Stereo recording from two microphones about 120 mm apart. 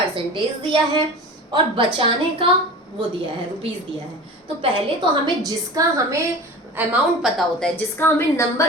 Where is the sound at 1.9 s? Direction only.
50° right (ahead or behind).